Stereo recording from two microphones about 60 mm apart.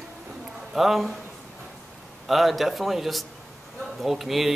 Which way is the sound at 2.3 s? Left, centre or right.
Centre.